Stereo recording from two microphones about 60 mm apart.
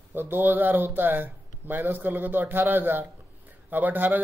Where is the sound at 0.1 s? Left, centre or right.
Right.